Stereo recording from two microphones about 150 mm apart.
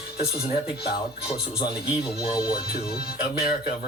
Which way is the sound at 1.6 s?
30° left (ahead or behind).